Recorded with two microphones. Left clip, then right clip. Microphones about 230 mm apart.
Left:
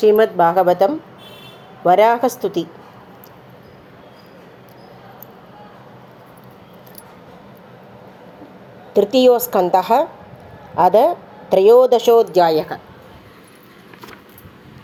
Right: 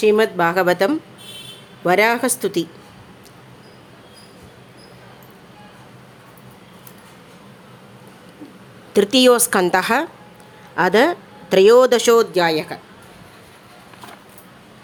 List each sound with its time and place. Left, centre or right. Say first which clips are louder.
0.0 s speech: left 3 dB; centre
8.9 s speech: left 1 dB; right